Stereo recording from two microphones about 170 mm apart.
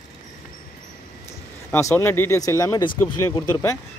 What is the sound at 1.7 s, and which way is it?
Speech, 15° left (ahead or behind).